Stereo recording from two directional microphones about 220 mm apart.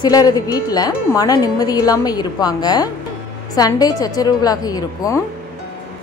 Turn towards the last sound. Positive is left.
turn(degrees=15)  # may be behind; listen again after turning